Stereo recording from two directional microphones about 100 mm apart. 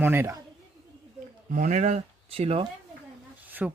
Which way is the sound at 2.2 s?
75° right (ahead or behind).